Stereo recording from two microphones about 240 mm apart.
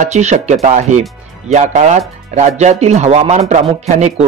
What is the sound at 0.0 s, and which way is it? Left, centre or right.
Speech, right.